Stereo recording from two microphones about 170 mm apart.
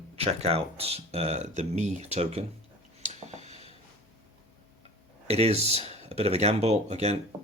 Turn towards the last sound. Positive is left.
turn(degrees=-40)  # may be behind; listen again after turning